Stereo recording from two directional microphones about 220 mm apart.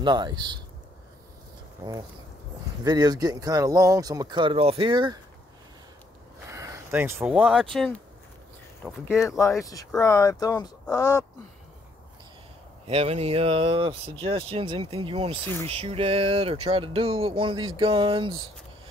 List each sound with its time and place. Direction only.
0.0 s speech: 20° right (ahead or behind)
1.8 s speech: 15° right (ahead or behind)
6.5 s speech: 15° right (ahead or behind)
8.8 s speech: centre (ahead or behind)
9.7 s speech: 15° left (ahead or behind)
12.8 s speech: 25° right (ahead or behind)